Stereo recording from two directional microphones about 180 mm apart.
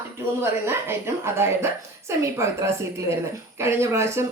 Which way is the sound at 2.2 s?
15° right (ahead or behind).